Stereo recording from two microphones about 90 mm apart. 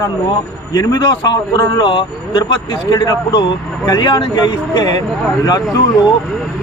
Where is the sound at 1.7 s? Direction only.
60° left (ahead or behind).